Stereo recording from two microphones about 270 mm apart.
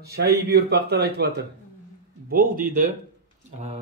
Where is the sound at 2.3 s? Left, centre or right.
Right.